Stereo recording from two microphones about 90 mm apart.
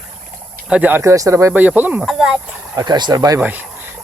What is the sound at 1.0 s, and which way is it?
Speech, 35° right (ahead or behind).